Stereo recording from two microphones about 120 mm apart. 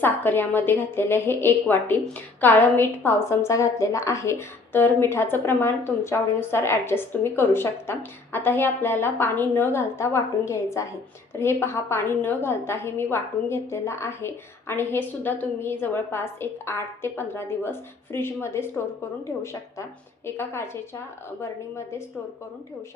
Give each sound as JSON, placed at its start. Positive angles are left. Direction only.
{"t": 0.0, "sound": "a woman's voice", "side_deg": 15}
{"t": 20.2, "sound": "a woman's voice", "side_deg": 20}